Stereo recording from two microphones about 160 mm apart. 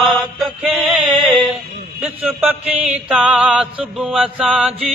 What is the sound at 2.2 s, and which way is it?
Music, 10° right (ahead or behind).